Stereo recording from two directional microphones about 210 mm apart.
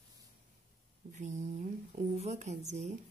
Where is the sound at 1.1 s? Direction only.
35° right (ahead or behind).